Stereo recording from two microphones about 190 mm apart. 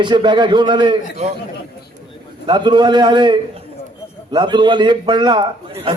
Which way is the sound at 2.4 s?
25° right (ahead or behind).